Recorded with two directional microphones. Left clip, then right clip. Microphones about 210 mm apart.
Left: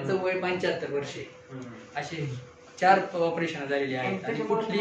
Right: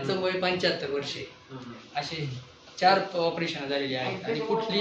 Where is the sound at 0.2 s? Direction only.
45° right (ahead or behind).